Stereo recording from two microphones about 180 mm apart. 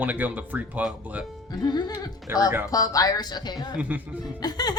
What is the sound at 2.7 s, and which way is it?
Speech, 20° left (ahead or behind).